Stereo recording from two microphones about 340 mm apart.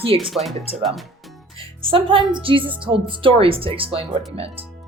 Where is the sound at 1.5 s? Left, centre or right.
Centre.